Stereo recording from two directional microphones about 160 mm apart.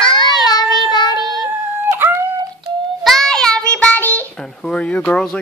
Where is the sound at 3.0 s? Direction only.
Centre (ahead or behind).